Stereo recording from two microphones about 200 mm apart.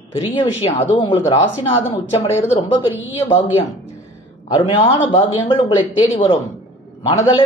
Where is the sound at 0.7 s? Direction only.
25° left (ahead or behind).